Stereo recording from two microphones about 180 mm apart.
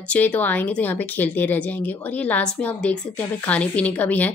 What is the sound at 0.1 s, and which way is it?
A woman's voice, 10° left (ahead or behind).